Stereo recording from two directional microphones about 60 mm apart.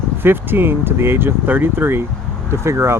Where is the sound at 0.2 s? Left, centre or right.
Right.